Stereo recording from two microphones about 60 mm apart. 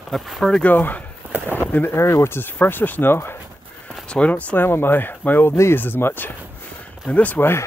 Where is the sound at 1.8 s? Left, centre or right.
Left.